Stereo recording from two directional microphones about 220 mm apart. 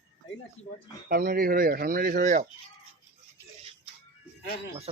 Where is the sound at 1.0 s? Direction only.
45° right (ahead or behind).